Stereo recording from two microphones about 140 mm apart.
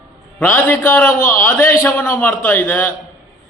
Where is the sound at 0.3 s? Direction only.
15° left (ahead or behind).